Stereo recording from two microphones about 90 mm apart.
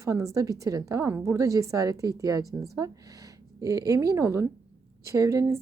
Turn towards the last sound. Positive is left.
turn(degrees=-35)  # may be behind; listen again after turning